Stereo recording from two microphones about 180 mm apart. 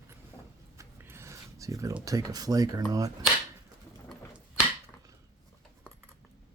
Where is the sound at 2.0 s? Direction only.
20° right (ahead or behind).